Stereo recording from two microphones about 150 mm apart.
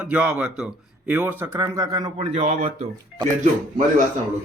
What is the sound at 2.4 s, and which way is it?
Speech, 55° right (ahead or behind).